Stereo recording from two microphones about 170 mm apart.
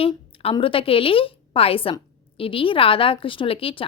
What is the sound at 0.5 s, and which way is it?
A woman's voice, 30° left (ahead or behind).